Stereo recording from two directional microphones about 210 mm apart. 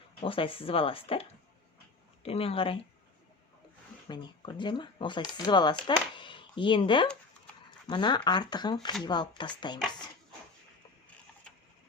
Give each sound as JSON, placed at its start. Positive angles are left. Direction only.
{"t": 0.2, "sound": "speech", "side_deg": 25}
{"t": 4.1, "sound": "speech", "side_deg": 20}